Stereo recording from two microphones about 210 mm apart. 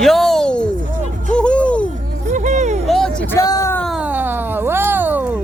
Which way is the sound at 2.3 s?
35° right (ahead or behind).